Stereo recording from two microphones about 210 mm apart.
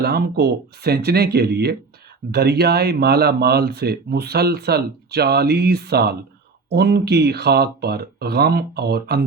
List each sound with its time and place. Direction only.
0.0 s speech: 50° right (ahead or behind)